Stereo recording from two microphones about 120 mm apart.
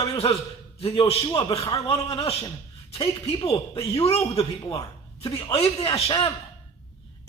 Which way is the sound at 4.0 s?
55° left (ahead or behind).